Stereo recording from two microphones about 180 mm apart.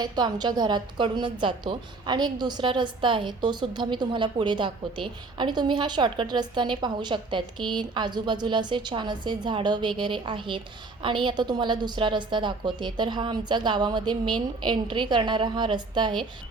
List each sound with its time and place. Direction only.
0.0 s a woman's voice: 25° right (ahead or behind)